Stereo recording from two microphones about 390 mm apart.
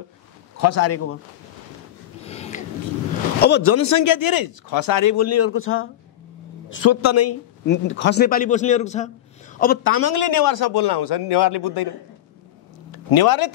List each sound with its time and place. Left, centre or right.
0.6 s a man's voice: left
2.2 s a sound: centre
3.3 s a man's voice: left
3.7 s a man's voice: left
7.6 s a man's voice: left
10.1 s a man's voice: left
12.9 s speech: left